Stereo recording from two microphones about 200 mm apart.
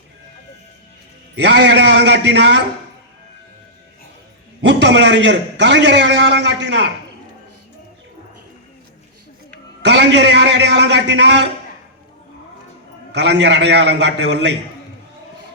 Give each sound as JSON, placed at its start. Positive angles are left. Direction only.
{"t": 1.4, "sound": "a man's voice", "side_deg": -60}
{"t": 4.6, "sound": "a man's voice", "side_deg": -60}
{"t": 9.8, "sound": "a man's voice", "side_deg": -60}
{"t": 13.1, "sound": "a man's voice", "side_deg": -60}